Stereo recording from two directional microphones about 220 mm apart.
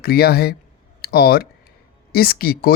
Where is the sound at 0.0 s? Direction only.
45° left (ahead or behind).